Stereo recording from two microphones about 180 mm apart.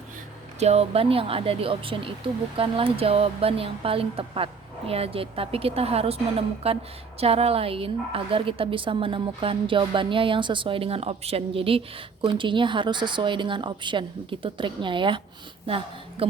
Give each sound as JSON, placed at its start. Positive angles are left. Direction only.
{"t": 0.6, "sound": "a woman's voice", "side_deg": -35}